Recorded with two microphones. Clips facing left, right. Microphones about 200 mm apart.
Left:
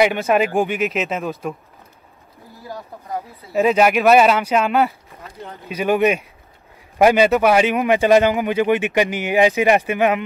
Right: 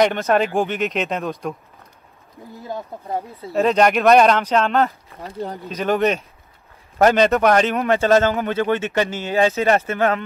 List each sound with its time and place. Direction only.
0.0 s speech: 10° left (ahead or behind)
2.6 s speech: 25° right (ahead or behind)
3.5 s a man's voice: 5° left (ahead or behind)
5.2 s speech: 35° right (ahead or behind)
5.7 s a man's voice: 10° left (ahead or behind)